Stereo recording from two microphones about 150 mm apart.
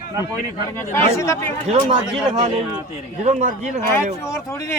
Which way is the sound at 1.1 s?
20° left (ahead or behind).